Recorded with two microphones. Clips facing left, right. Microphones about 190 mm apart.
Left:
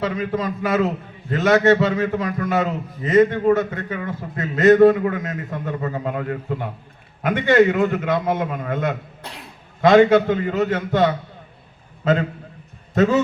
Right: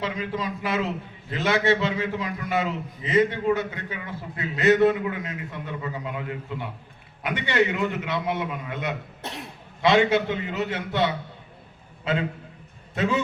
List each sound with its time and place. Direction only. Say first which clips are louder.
0.0 s a man's voice: left 6 dB; 45° left (ahead or behind)
12.9 s a man's voice: left 8 dB; 45° left (ahead or behind)